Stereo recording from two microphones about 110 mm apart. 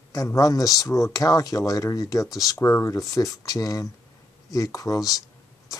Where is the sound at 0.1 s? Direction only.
30° left (ahead or behind).